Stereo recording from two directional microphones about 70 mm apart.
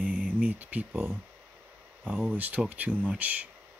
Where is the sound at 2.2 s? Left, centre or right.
Right.